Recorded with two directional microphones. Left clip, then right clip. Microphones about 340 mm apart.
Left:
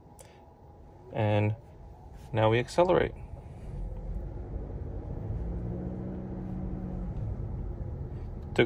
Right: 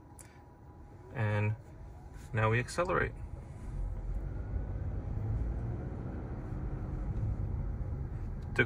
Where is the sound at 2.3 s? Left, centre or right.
Left.